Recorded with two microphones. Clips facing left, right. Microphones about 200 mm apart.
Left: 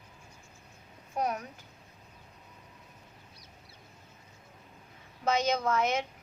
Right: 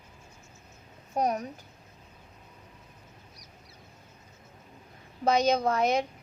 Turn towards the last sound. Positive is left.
turn(degrees=-35)  # may be behind; listen again after turning